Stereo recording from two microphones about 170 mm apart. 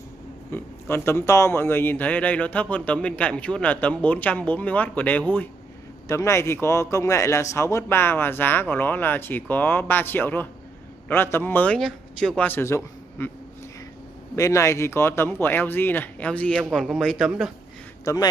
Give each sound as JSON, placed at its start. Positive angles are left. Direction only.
{"t": 0.5, "sound": "speech", "side_deg": 10}
{"t": 14.3, "sound": "speech", "side_deg": 20}
{"t": 18.0, "sound": "a man's voice", "side_deg": 20}